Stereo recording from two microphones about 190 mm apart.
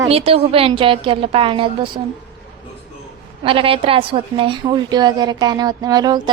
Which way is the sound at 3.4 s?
30° right (ahead or behind).